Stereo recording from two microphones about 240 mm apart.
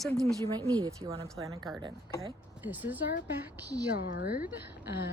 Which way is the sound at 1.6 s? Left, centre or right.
Centre.